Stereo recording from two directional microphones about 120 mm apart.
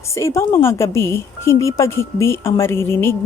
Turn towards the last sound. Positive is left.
turn(degrees=20)  # may be behind; listen again after turning